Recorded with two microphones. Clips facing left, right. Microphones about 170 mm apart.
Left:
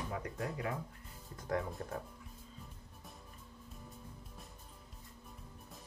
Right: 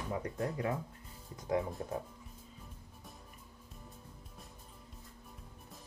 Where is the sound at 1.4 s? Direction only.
20° right (ahead or behind).